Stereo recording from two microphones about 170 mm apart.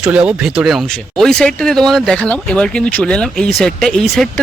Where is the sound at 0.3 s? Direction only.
5° right (ahead or behind).